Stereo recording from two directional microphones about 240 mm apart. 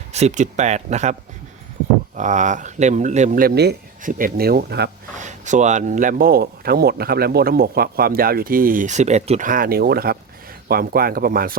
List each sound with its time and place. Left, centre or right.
0.1 s speech: right
2.1 s speech: right
5.2 s speech: right